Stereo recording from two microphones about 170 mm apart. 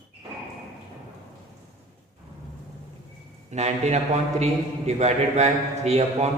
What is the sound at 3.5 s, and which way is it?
A man's voice, 40° right (ahead or behind).